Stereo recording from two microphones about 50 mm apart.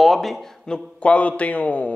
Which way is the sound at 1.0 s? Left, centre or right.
Left.